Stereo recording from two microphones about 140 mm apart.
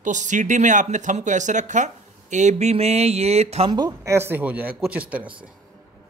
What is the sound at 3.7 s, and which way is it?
Speech, 30° right (ahead or behind).